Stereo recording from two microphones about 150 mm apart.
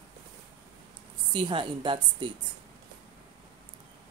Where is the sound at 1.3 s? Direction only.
30° right (ahead or behind).